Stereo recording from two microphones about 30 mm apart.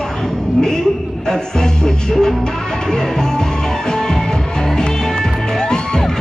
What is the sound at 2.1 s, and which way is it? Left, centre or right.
Music, centre.